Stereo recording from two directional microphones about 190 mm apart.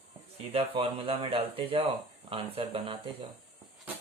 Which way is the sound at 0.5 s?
30° right (ahead or behind).